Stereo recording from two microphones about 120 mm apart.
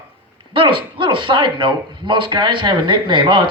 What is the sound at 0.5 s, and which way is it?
Speech, 45° right (ahead or behind).